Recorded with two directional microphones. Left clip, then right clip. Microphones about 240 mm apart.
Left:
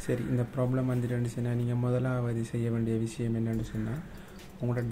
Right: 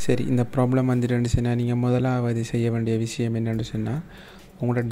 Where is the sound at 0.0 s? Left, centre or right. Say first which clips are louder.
Right 8 dB; right.